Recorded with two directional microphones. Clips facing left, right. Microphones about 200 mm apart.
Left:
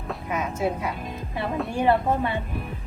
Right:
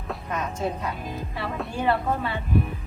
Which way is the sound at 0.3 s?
10° left (ahead or behind).